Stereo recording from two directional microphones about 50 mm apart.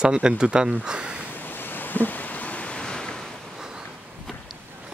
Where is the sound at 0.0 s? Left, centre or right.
Centre.